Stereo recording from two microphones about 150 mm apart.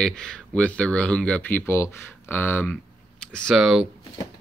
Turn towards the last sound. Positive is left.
turn(degrees=0)  # may be behind; listen again after turning